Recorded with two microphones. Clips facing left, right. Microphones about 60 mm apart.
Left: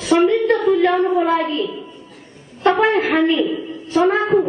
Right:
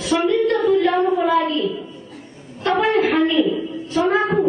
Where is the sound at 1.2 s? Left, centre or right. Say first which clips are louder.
Even; left.